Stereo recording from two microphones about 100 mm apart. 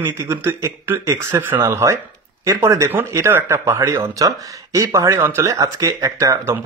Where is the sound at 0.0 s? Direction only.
25° right (ahead or behind).